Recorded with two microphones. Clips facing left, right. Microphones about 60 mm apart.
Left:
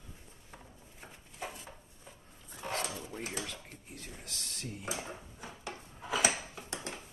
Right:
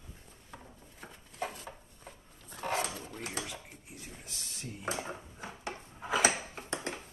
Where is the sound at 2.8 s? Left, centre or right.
Right.